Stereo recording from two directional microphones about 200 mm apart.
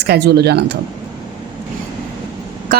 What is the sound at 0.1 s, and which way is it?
Speech, 55° right (ahead or behind).